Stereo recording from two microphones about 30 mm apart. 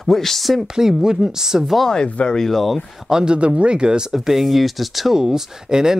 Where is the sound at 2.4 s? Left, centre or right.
Centre.